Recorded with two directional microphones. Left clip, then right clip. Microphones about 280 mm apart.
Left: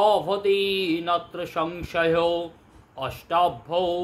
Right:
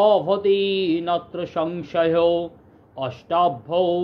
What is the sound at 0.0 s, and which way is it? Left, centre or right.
Speech, centre.